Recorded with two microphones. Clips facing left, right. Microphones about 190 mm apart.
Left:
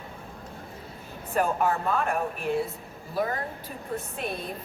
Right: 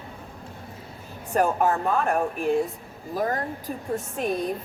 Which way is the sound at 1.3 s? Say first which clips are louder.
Right 3 dB; 45° right (ahead or behind).